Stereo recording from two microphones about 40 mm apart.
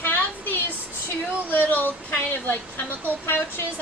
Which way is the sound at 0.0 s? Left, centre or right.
Left.